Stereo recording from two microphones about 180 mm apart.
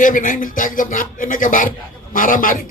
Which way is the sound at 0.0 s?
50° left (ahead or behind).